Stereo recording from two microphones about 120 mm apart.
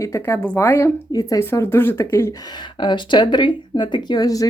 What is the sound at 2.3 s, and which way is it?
Speech, 35° left (ahead or behind).